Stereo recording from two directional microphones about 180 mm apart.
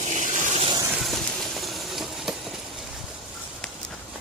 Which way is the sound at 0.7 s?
20° right (ahead or behind).